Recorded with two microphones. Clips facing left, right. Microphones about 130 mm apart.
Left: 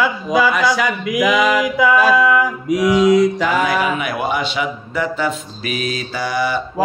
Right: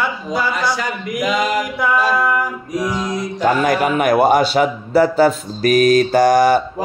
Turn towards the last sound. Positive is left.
turn(degrees=-45)  # may be behind; listen again after turning